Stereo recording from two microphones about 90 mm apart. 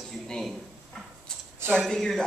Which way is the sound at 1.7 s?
5° left (ahead or behind).